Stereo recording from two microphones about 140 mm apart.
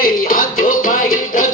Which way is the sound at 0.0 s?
85° left.